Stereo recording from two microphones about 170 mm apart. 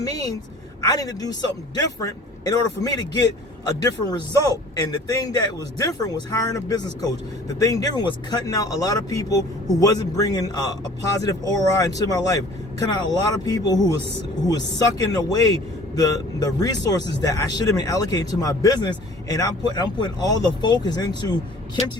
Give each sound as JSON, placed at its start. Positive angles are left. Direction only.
{"t": 0.0, "sound": "a man's voice", "side_deg": 20}